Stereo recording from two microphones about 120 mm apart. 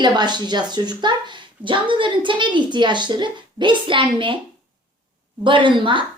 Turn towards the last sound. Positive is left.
turn(degrees=-45)  # may be behind; listen again after turning